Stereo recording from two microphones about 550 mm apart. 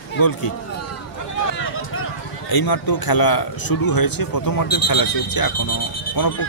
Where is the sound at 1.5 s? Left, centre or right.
Left.